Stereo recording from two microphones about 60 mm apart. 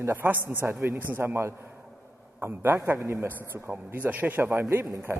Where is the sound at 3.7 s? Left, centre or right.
Right.